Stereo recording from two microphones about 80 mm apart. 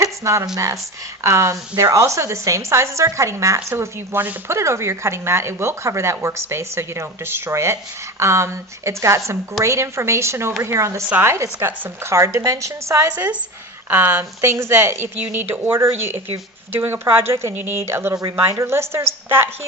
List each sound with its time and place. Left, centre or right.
0.0 s a sound: right
0.5 s a woman's voice: right
13.9 s a woman's voice: right